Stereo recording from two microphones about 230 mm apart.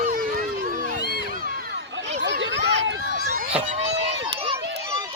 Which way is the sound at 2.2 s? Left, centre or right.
Right.